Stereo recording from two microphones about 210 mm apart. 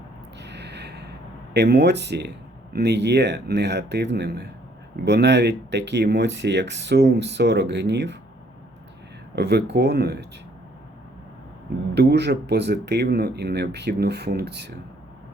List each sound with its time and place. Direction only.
0.3 s a sound: 55° right (ahead or behind)
1.5 s speech: 55° right (ahead or behind)
9.3 s speech: 55° right (ahead or behind)
11.9 s speech: 50° right (ahead or behind)